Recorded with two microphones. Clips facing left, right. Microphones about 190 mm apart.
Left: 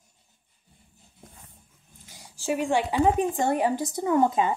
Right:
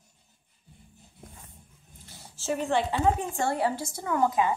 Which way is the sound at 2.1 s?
15° left (ahead or behind).